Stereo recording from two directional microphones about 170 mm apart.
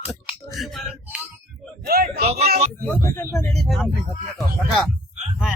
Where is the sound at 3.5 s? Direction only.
Centre (ahead or behind).